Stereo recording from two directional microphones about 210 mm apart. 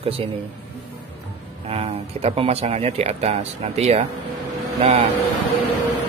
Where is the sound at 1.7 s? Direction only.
30° right (ahead or behind).